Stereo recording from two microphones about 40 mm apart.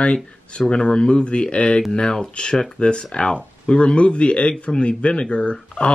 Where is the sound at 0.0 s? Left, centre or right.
Left.